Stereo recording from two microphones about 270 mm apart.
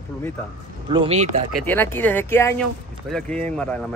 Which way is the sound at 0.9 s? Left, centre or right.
Right.